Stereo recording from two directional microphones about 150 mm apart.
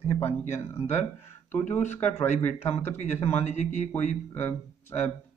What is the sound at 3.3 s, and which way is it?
Speech, 45° left (ahead or behind).